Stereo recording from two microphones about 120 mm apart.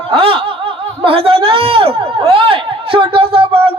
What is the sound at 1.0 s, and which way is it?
Speech, 55° right (ahead or behind).